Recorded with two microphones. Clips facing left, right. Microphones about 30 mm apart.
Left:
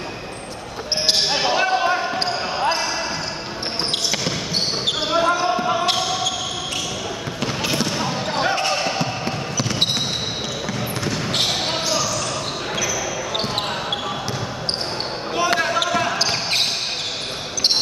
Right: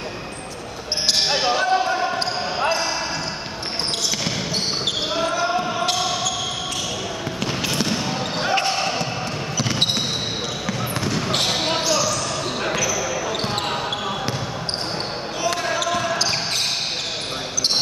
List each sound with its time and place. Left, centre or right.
1.3 s basketball bounce: centre
1.6 s basketball bounce: centre
5.2 s basketball bounce: centre
7.6 s basketball bounce: centre
15.3 s basketball bounce: left